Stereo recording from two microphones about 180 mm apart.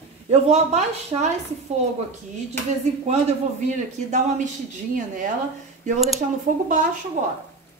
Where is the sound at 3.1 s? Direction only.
40° right (ahead or behind).